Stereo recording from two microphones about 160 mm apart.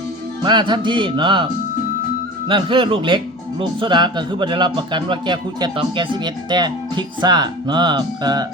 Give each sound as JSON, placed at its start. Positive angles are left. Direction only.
{"t": 0.4, "sound": "speech", "side_deg": -30}
{"t": 2.5, "sound": "speech", "side_deg": -30}